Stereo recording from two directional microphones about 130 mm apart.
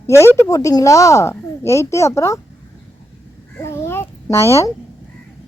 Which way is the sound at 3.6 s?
20° left (ahead or behind).